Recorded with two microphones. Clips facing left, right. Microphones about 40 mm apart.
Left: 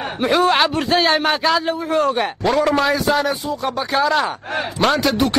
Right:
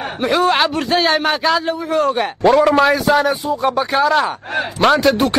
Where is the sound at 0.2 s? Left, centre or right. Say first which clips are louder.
Right 1 dB; centre.